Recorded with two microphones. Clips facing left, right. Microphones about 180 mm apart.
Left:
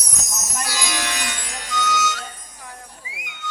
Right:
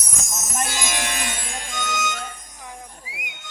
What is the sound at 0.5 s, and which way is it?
Music, 50° right (ahead or behind).